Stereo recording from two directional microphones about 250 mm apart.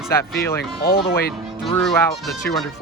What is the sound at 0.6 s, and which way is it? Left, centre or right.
Speech, left.